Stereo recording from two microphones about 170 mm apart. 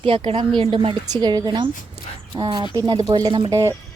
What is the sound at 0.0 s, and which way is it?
A woman's voice, 35° right (ahead or behind).